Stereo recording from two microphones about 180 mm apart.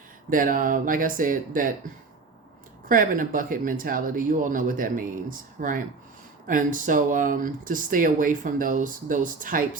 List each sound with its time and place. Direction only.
0.3 s speech: 50° right (ahead or behind)
2.9 s speech: 50° right (ahead or behind)